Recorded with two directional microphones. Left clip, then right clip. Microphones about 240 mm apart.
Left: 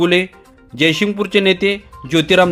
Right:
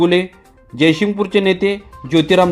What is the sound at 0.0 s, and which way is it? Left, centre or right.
A man's voice, centre.